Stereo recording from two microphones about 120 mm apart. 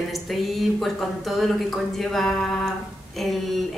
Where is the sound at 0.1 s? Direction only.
Centre (ahead or behind).